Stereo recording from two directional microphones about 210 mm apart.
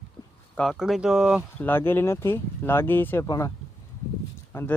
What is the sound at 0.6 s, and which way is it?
Speech, centre (ahead or behind).